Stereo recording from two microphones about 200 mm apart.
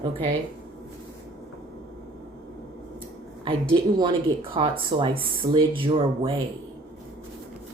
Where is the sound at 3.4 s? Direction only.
25° right (ahead or behind).